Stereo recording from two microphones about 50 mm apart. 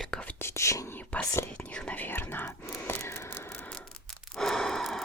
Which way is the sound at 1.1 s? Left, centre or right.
Left.